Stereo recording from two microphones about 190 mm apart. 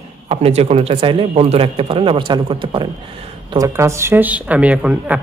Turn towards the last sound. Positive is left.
turn(degrees=-5)  # may be behind; listen again after turning